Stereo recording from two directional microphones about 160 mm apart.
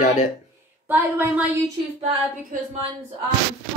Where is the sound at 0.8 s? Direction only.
10° right (ahead or behind).